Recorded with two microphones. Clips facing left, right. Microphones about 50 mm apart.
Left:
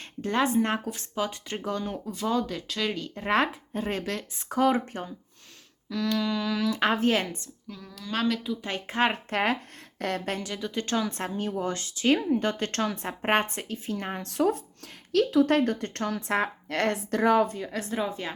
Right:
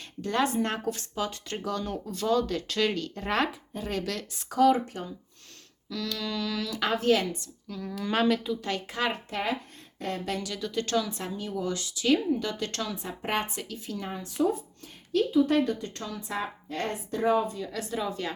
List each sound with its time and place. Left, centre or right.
0.0 s speech: left; by 2.6 s centre
2.6 s speech: centre
2.9 s speech: left
5.9 s speech: left
7.9 s speech: right
8.1 s speech: centre
8.6 s speech: left
9.3 s speech: left
10.2 s speech: left
11.1 s speech: left
14.0 s speech: left
15.1 s speech: left
17.5 s speech: left